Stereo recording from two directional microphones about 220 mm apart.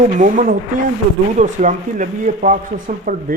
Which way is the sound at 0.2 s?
40° right (ahead or behind).